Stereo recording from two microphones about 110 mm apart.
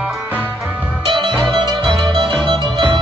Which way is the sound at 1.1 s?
45° right (ahead or behind).